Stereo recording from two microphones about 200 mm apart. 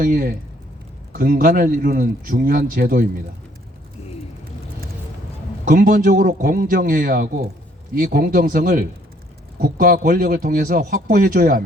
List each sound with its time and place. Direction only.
0.0 s speech: 45° right (ahead or behind)
5.6 s speech: 45° right (ahead or behind)